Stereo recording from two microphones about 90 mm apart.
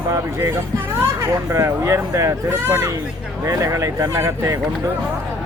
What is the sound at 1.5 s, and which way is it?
Speech, 35° right (ahead or behind).